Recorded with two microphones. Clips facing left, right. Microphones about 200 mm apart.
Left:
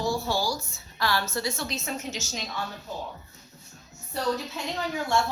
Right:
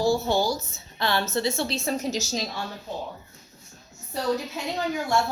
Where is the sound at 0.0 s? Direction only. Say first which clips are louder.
Right 5 dB; 25° right (ahead or behind).